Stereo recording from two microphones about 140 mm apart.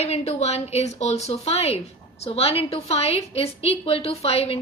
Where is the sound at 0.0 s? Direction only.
50° left (ahead or behind).